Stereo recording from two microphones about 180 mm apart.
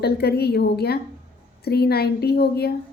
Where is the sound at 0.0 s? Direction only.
60° left (ahead or behind).